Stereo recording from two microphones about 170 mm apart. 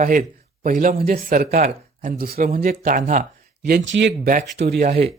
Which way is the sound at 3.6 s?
75° right (ahead or behind).